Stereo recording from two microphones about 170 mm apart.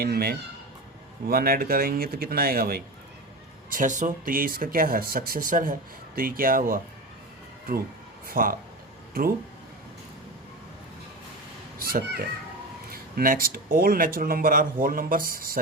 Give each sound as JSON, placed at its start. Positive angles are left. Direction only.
{"t": 0.0, "sound": "speech", "side_deg": -65}
{"t": 3.7, "sound": "speech", "side_deg": -50}
{"t": 8.3, "sound": "speech", "side_deg": -55}
{"t": 11.8, "sound": "speech", "side_deg": -60}